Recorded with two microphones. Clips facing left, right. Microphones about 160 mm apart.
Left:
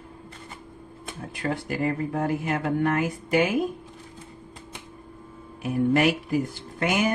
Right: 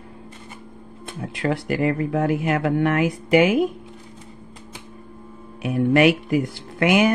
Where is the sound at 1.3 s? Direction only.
80° right.